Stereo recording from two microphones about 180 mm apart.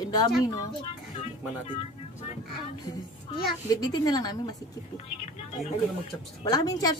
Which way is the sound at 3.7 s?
20° left (ahead or behind).